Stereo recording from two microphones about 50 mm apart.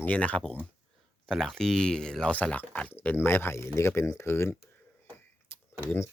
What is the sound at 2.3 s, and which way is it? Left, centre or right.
Speech, left.